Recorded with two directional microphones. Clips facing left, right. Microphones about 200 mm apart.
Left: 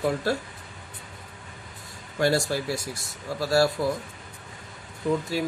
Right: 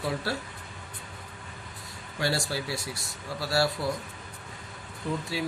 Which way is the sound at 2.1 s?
45° left (ahead or behind).